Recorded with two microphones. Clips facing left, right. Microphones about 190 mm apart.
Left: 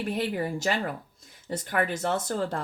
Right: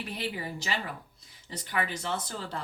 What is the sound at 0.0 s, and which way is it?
Speech, 50° left (ahead or behind).